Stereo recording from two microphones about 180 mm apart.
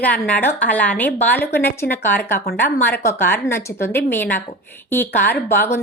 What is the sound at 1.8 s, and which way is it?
Speech, 60° left (ahead or behind).